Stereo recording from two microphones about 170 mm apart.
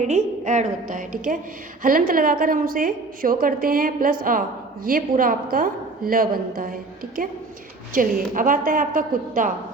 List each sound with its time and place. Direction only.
0.0 s a woman's voice: 45° right (ahead or behind)